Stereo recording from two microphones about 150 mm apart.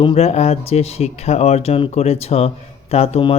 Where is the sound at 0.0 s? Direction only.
40° left (ahead or behind).